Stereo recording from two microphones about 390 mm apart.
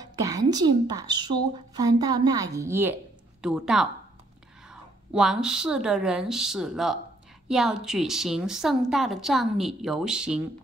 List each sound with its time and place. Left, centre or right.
0.0 s a woman's voice: centre
5.1 s a woman's voice: centre